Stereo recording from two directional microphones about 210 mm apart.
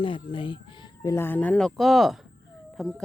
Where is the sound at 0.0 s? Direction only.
25° left (ahead or behind).